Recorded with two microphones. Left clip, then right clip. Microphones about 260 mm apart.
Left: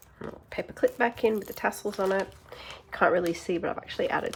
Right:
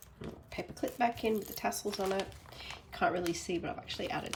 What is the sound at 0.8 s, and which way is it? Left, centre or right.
Speech, centre.